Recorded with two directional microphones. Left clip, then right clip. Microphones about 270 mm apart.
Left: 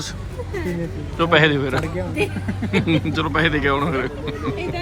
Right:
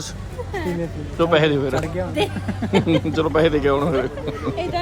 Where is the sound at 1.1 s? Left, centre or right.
Centre.